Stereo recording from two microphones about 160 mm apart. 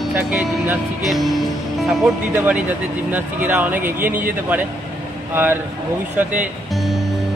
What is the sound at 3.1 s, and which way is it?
Speech, 10° right (ahead or behind).